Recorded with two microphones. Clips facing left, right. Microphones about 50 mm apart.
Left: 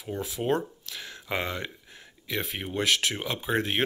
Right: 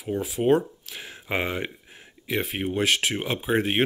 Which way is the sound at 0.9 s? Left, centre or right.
Centre.